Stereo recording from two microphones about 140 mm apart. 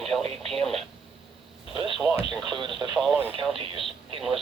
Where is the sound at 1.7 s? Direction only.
40° right (ahead or behind).